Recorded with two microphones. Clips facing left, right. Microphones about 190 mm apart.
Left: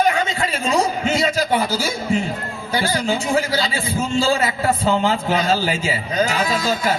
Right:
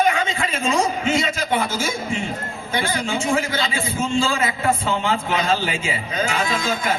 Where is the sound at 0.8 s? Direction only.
40° left (ahead or behind).